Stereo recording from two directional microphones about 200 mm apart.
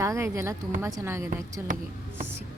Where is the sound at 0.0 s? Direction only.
15° right (ahead or behind).